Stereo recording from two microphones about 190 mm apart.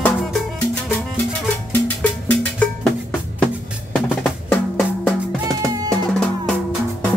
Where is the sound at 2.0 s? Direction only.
5° left (ahead or behind).